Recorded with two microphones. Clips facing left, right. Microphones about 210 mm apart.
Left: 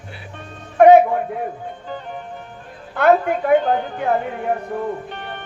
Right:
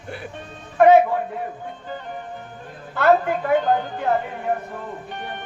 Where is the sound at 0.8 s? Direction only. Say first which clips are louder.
Left 3 dB; 50° left (ahead or behind).